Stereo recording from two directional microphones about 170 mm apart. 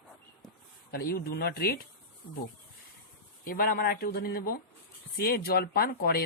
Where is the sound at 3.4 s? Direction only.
60° left (ahead or behind).